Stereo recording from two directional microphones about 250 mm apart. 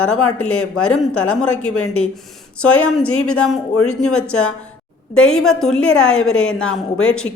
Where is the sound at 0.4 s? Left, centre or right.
Left.